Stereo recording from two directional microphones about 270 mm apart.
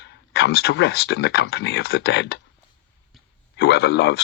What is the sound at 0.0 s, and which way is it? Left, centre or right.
Speech, left.